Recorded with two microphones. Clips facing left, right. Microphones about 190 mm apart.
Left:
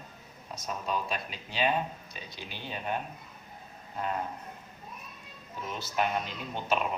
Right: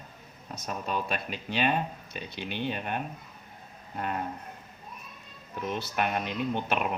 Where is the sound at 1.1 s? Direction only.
60° right (ahead or behind).